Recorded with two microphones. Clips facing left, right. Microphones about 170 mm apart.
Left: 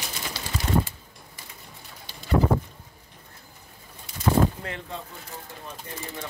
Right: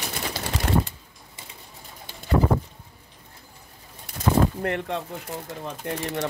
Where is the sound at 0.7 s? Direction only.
65° right (ahead or behind).